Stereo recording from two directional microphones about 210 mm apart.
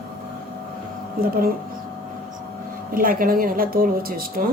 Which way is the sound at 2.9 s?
40° right (ahead or behind).